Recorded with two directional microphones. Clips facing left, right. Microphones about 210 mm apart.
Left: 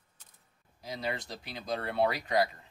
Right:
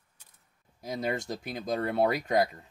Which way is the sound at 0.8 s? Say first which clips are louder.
Right 5 dB; 50° right (ahead or behind).